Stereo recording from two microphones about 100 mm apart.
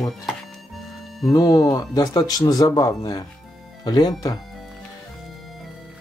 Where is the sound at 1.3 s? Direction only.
35° left (ahead or behind).